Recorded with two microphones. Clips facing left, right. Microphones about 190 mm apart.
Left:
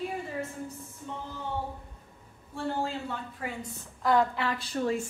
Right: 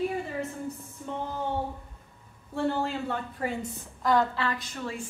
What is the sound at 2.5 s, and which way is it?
Speech, 70° right (ahead or behind).